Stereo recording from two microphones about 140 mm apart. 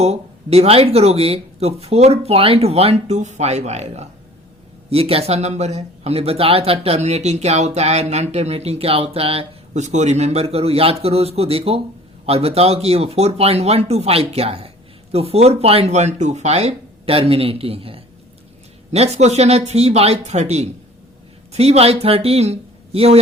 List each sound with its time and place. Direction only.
0.0 s speech: 50° right (ahead or behind)